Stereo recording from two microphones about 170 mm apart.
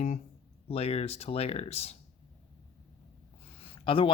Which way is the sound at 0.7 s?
35° left (ahead or behind).